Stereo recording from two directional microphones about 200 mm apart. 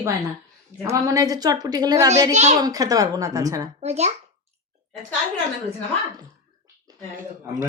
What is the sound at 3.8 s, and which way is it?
Speech, 30° right (ahead or behind).